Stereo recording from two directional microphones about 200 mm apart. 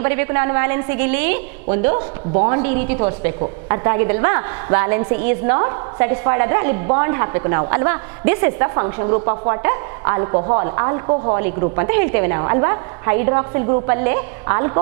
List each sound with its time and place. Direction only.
0.0 s a woman's voice: 15° right (ahead or behind)